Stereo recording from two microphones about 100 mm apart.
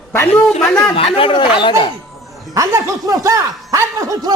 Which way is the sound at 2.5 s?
30° right (ahead or behind).